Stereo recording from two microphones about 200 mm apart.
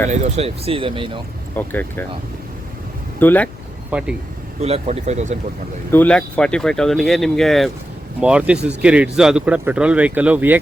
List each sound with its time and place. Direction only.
0.1 s speech: 35° right (ahead or behind)
1.5 s speech: 10° left (ahead or behind)
3.2 s speech: 10° left (ahead or behind)
3.9 s speech: 5° right (ahead or behind)
4.6 s speech: 35° right (ahead or behind)
5.9 s speech: 5° left (ahead or behind)